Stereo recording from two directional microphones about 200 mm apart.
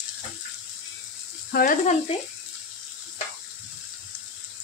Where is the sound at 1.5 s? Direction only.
45° left (ahead or behind).